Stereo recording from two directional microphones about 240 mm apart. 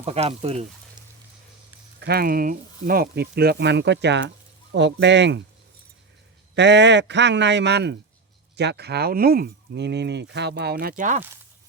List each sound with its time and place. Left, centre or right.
0.0 s speech: right
2.0 s speech: right
6.5 s speech: right